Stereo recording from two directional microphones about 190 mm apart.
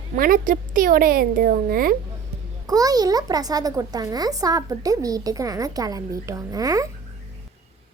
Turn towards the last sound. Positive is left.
turn(degrees=-20)  # may be behind; listen again after turning